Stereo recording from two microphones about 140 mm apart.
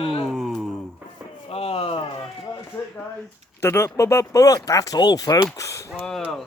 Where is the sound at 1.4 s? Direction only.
45° left (ahead or behind).